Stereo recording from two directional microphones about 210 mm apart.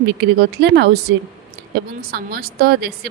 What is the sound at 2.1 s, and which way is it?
Speech, 45° right (ahead or behind).